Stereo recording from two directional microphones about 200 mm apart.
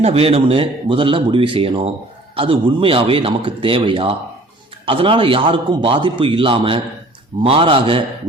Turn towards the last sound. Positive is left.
turn(degrees=-25)  # may be behind; listen again after turning